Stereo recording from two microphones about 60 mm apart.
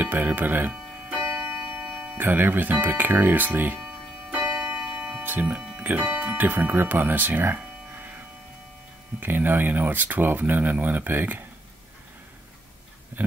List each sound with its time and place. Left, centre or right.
0.0 s music: right
2.1 s speech: right
4.4 s a sound: centre
5.2 s speech: right
9.2 s speech: right